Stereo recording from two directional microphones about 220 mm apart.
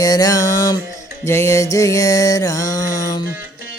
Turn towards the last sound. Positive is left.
turn(degrees=15)  # may be behind; listen again after turning